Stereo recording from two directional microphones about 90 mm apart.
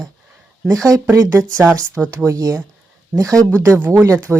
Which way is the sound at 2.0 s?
10° right (ahead or behind).